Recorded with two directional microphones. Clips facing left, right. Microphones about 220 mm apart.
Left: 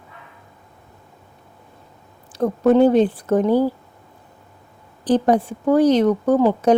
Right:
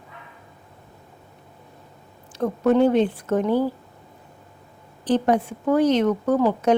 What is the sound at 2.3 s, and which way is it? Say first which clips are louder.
Speech: left 4 dB; 35° left (ahead or behind).